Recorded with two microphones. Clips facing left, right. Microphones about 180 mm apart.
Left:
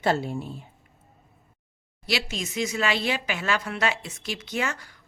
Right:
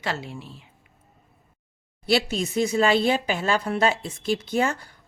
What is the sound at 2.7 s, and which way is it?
Speech, 35° right (ahead or behind).